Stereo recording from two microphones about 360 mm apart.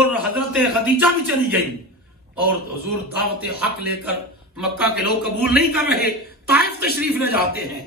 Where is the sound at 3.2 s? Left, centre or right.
Left.